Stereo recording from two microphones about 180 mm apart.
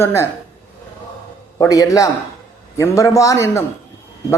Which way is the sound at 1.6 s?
20° left (ahead or behind).